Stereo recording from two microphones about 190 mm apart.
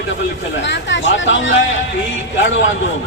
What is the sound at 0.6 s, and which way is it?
Speech, 70° left (ahead or behind).